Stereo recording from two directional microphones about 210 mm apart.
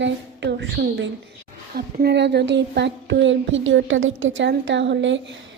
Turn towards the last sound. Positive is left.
turn(degrees=-60)  # may be behind; listen again after turning